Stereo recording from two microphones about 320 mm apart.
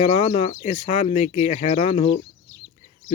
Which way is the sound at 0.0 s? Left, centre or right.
Centre.